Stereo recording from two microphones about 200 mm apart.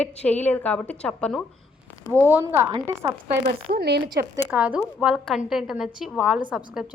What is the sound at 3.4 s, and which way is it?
Speech, 50° right (ahead or behind).